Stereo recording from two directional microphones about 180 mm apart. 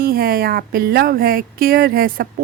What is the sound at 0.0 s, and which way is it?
Speech, 55° right (ahead or behind).